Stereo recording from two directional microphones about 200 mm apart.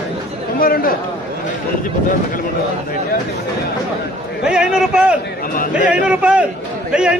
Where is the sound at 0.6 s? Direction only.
45° left (ahead or behind).